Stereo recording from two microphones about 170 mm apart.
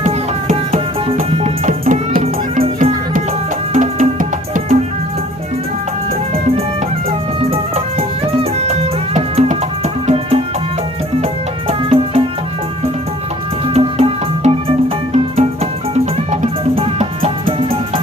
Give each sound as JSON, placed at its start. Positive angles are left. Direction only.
{"t": 1.6, "sound": "music", "side_deg": -50}
{"t": 3.8, "sound": "music", "side_deg": -45}
{"t": 7.5, "sound": "music", "side_deg": -35}
{"t": 11.7, "sound": "music", "side_deg": -35}
{"t": 13.7, "sound": "music", "side_deg": -35}